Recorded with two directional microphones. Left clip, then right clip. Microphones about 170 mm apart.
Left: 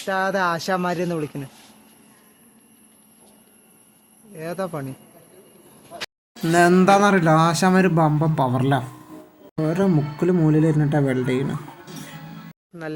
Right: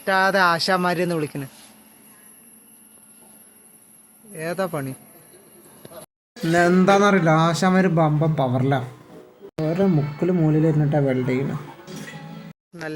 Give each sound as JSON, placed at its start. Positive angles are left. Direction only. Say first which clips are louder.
{"t": 0.0, "sound": "speech", "louder": "right 4 dB", "side_deg": -5}
{"t": 4.3, "sound": "speech", "louder": "right 3 dB", "side_deg": -15}
{"t": 6.5, "sound": "speech", "louder": "left 2 dB", "side_deg": 15}